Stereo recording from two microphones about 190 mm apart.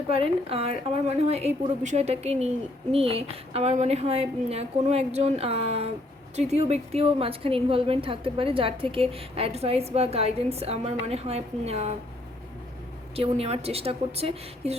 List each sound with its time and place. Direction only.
0.1 s a woman's voice: 30° right (ahead or behind)
13.1 s a woman's voice: 30° right (ahead or behind)